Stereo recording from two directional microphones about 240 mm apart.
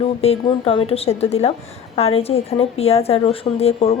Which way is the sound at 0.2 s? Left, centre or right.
Left.